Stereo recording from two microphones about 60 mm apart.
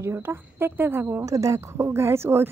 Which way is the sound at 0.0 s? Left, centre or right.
Right.